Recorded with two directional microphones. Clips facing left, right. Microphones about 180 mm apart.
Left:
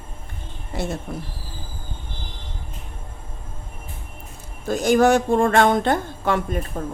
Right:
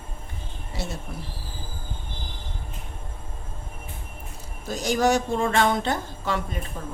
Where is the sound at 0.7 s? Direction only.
50° left (ahead or behind).